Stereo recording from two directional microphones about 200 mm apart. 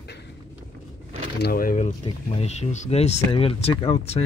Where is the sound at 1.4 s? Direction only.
45° left (ahead or behind); by 4.3 s 25° left (ahead or behind).